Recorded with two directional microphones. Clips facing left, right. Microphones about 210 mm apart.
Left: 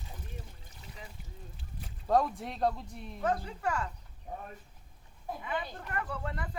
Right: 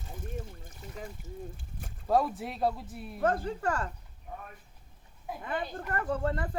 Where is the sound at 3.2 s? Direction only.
50° right (ahead or behind).